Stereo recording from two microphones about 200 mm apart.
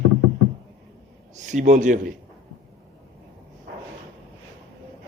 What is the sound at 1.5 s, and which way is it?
Speech, 35° right (ahead or behind).